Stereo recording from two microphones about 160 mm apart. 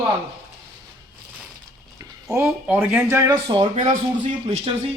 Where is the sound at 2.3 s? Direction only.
10° right (ahead or behind).